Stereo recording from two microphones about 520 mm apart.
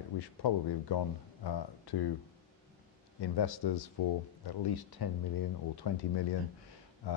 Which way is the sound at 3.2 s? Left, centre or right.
Left.